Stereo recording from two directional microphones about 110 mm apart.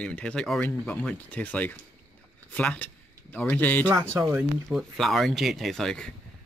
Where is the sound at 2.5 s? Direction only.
15° left (ahead or behind).